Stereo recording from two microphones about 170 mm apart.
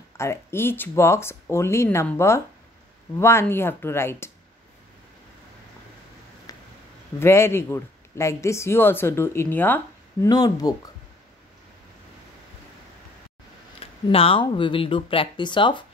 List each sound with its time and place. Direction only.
0.2 s speech: 15° left (ahead or behind)
6.5 s a sound: 20° left (ahead or behind)
7.2 s speech: 15° left (ahead or behind)
14.0 s speech: 35° left (ahead or behind)